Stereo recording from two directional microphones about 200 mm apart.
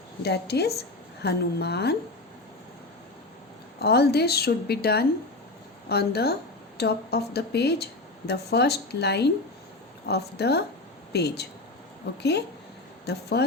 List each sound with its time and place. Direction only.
0.2 s speech: 55° left (ahead or behind)
3.8 s a woman's voice: 55° left (ahead or behind)